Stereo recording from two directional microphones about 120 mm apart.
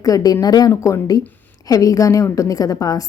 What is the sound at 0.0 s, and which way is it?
A woman's voice, 30° left (ahead or behind).